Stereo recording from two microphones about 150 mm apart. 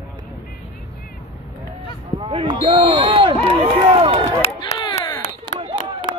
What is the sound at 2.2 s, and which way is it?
Speech, 35° right (ahead or behind).